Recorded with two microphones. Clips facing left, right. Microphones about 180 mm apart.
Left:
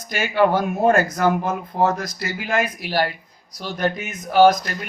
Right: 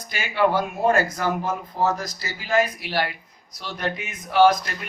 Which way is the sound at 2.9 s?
40° left (ahead or behind).